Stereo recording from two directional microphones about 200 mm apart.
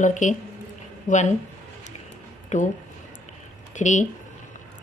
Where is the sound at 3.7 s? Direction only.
40° left (ahead or behind).